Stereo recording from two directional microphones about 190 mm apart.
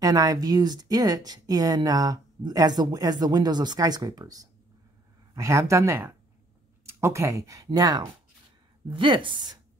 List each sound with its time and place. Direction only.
0.0 s speech: 20° right (ahead or behind)